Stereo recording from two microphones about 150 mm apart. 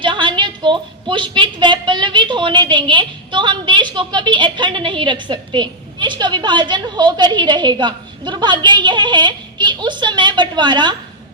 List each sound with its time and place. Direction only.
0.0 s a woman's voice: 30° right (ahead or behind)